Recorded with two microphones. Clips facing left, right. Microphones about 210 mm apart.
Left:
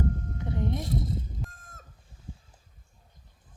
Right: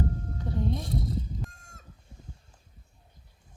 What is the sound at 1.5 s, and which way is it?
Chicken, 50° left (ahead or behind).